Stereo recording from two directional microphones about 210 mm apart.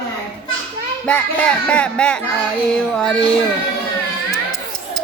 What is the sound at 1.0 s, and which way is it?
Speech, 5° left (ahead or behind).